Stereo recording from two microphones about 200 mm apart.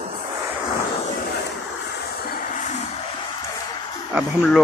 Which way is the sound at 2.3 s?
40° left (ahead or behind).